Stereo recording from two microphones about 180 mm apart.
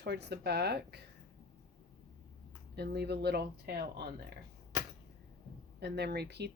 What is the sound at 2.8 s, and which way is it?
Speech, 65° right (ahead or behind).